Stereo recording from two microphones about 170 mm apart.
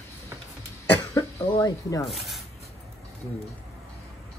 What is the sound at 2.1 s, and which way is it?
Speech, centre (ahead or behind).